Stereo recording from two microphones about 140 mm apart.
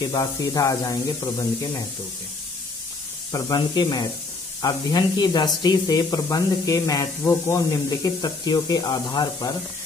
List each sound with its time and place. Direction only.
0.0 s speech: 25° left (ahead or behind)
3.3 s speech: 25° left (ahead or behind)